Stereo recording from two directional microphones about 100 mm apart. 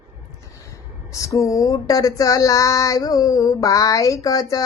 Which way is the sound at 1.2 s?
30° left (ahead or behind).